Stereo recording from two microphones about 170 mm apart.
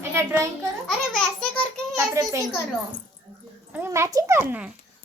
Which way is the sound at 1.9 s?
20° right (ahead or behind).